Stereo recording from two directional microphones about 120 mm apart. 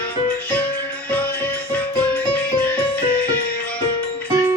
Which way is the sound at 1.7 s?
15° left (ahead or behind).